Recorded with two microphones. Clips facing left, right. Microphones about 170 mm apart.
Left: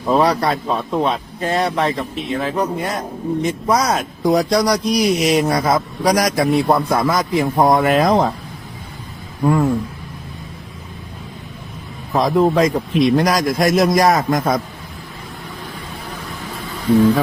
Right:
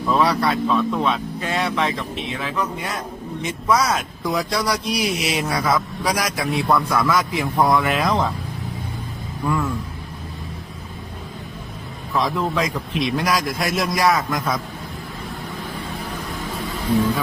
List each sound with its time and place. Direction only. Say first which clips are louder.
0.1 s a man's voice: left 4 dB; 40° left (ahead or behind)
9.4 s a man's voice: left 7 dB; 35° left (ahead or behind)
12.1 s a man's voice: left 7 dB; 45° left (ahead or behind)